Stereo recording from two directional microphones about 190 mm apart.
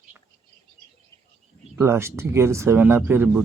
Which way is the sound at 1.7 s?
15° right (ahead or behind).